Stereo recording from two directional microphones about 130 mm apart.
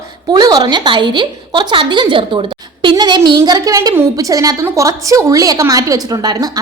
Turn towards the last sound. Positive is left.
turn(degrees=-30)  # may be behind; listen again after turning